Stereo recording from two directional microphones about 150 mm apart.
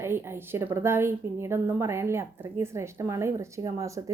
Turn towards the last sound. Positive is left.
turn(degrees=-20)  # may be behind; listen again after turning